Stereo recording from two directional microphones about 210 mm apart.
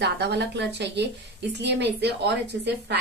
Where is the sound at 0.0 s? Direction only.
55° right (ahead or behind).